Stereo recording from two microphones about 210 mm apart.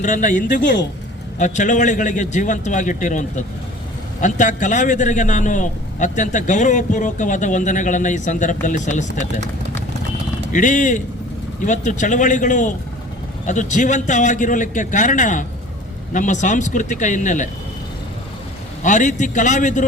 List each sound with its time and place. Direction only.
0.0 s a man's voice: 35° left (ahead or behind)
0.6 s speech: 55° left (ahead or behind)
1.4 s a man's voice: 35° left (ahead or behind)
10.5 s a man's voice: 35° left (ahead or behind)
18.8 s a man's voice: 35° left (ahead or behind)